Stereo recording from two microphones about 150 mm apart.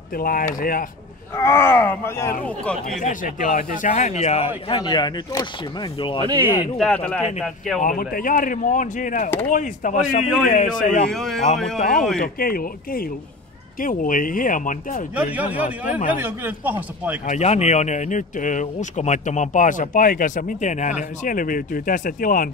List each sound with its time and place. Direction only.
0.1 s speech: 70° left (ahead or behind)
1.3 s speech: 15° left (ahead or behind)
3.0 s speech: 60° left (ahead or behind)
4.6 s speech: 30° left (ahead or behind)
6.8 s speech: 10° left (ahead or behind)
7.8 s speech: 70° left (ahead or behind)
11.1 s speech: centre (ahead or behind)
12.2 s speech: 75° left (ahead or behind)
13.7 s speech: 65° left (ahead or behind)
15.1 s a man's voice: 10° right (ahead or behind)
17.3 s speech: 50° left (ahead or behind); by 22.5 s 65° left (ahead or behind)